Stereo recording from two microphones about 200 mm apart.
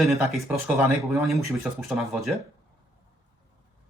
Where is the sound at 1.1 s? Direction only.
Centre (ahead or behind).